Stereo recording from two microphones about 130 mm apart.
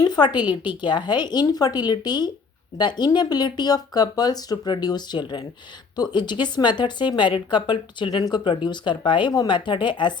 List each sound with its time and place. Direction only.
0.0 s speech: 30° left (ahead or behind)